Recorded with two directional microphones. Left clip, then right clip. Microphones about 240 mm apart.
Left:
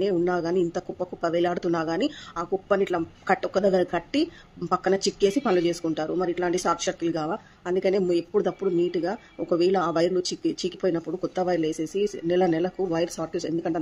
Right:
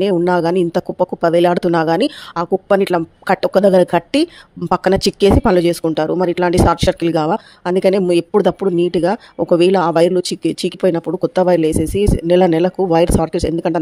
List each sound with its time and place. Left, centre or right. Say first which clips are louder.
0.0 s speech: right 10 dB; right